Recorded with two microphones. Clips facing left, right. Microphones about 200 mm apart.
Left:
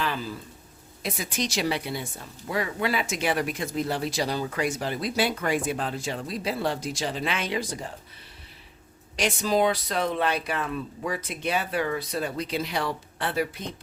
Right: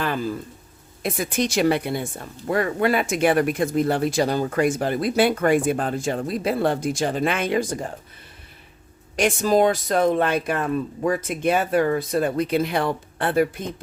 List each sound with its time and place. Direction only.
0.0 s a sound: 50° right (ahead or behind)
1.0 s speech: 55° right (ahead or behind)
9.1 s speech: 50° right (ahead or behind)